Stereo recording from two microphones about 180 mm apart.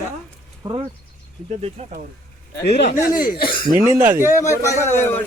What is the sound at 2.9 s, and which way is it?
Speech, 50° left (ahead or behind).